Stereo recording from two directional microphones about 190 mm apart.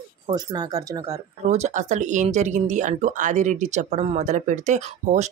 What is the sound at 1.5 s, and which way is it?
Speech, 35° right (ahead or behind).